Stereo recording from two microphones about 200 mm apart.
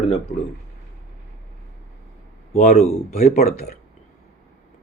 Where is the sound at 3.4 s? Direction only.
50° left (ahead or behind).